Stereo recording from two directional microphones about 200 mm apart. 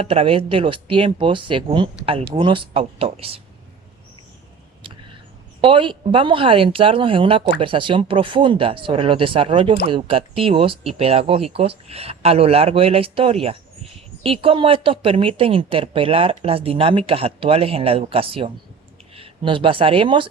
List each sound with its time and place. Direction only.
0.0 s a woman's voice: 30° right (ahead or behind)
5.5 s a woman's voice: 25° right (ahead or behind)